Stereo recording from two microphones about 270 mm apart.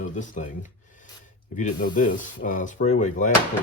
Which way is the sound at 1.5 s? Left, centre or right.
Left.